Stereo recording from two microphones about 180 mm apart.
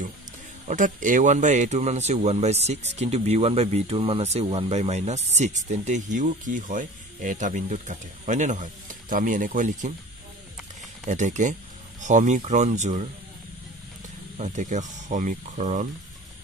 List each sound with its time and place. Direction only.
0.7 s speech: 45° right (ahead or behind)
11.1 s speech: 45° right (ahead or behind)
14.4 s speech: 45° right (ahead or behind)